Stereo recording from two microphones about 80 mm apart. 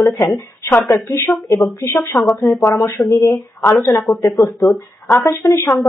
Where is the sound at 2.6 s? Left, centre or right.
Left.